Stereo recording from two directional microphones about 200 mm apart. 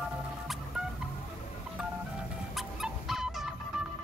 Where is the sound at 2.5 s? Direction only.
Centre (ahead or behind).